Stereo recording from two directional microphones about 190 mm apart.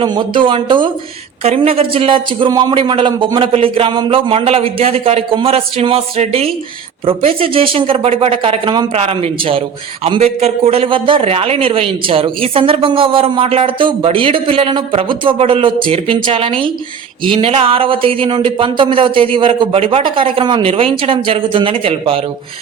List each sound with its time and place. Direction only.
0.0 s speech: 25° right (ahead or behind)